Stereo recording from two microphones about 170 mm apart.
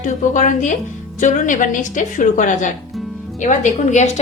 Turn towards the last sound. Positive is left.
turn(degrees=45)  # may be behind; listen again after turning